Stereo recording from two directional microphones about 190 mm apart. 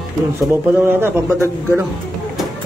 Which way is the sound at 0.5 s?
10° right (ahead or behind).